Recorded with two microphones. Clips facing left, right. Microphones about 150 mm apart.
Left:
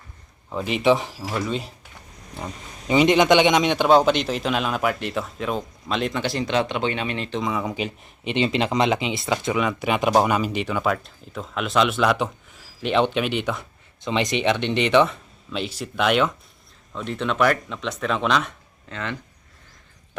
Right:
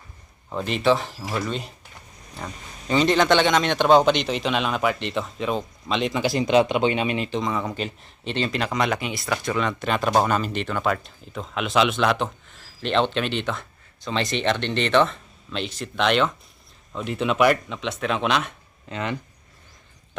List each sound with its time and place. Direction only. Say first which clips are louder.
0.5 s speech: left 1 dB; 5° left (ahead or behind)
1.2 s a man's voice: left 1 dB; centre (ahead or behind)
2.3 s a man's voice: left 2 dB; 15° left (ahead or behind); by 7.3 s 15° right (ahead or behind)
7.3 s speech: even; centre (ahead or behind)
8.4 s speech: left 3 dB; 25° left (ahead or behind); by 16.3 s 5° left (ahead or behind)
16.9 s a man's voice: right 1 dB; 5° right (ahead or behind)
18.9 s speech: right 3 dB; 15° right (ahead or behind)